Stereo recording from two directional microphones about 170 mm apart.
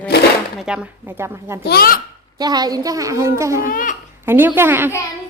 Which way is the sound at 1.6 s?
65° left (ahead or behind).